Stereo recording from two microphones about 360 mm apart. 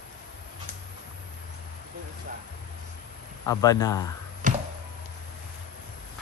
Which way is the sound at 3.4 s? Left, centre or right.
Centre.